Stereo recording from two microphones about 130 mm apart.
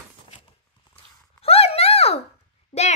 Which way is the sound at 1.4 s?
50° left (ahead or behind).